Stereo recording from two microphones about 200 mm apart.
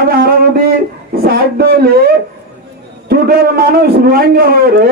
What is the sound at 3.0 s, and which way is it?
Speech, 50° right (ahead or behind).